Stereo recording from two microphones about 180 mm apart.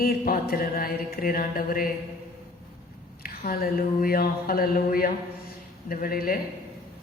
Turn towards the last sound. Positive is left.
turn(degrees=50)  # may be behind; listen again after turning